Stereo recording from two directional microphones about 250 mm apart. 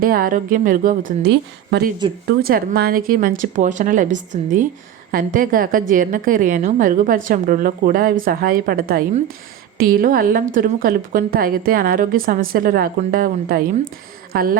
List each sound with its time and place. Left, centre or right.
0.0 s a woman's voice: right